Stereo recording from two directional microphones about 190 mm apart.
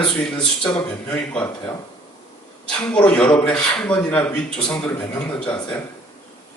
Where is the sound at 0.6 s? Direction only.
5° left (ahead or behind).